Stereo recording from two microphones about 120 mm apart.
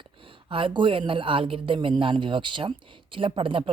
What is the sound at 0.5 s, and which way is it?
Speech, 45° right (ahead or behind).